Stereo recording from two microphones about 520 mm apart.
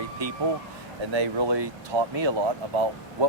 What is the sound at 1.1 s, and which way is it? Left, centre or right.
Speech, right.